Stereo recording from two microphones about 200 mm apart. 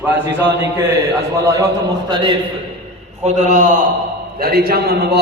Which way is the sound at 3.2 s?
35° right (ahead or behind).